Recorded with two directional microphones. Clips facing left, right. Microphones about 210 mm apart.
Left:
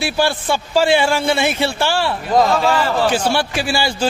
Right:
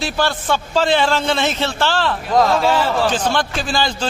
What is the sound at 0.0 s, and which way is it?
A man's voice, 10° left (ahead or behind).